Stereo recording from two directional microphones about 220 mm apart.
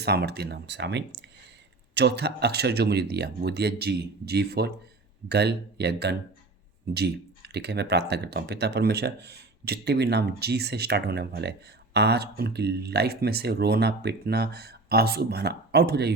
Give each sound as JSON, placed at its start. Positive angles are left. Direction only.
{"t": 0.0, "sound": "speech", "side_deg": -45}